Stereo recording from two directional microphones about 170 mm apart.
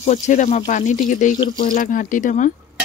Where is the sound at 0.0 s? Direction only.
45° left (ahead or behind).